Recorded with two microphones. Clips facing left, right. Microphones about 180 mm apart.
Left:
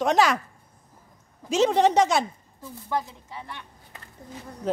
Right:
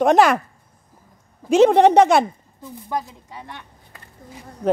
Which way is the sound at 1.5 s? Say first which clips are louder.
Right 7 dB; 60° right (ahead or behind).